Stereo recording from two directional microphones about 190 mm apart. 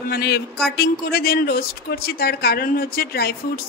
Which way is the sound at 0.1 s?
60° left (ahead or behind).